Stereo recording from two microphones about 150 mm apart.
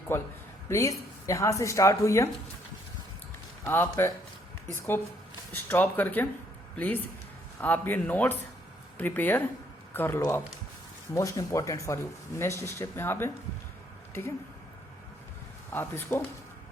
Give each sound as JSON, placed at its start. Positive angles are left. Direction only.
{"t": 0.1, "sound": "a woman's voice", "side_deg": 15}
{"t": 3.6, "sound": "a woman's voice", "side_deg": 15}
{"t": 15.7, "sound": "speech", "side_deg": 15}